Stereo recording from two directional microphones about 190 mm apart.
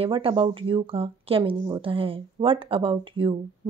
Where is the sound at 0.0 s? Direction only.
25° right (ahead or behind).